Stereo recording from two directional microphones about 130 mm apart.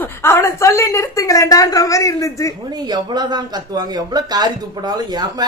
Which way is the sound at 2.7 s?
35° right (ahead or behind).